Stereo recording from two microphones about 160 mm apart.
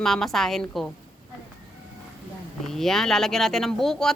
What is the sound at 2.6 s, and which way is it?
A woman's voice, centre (ahead or behind).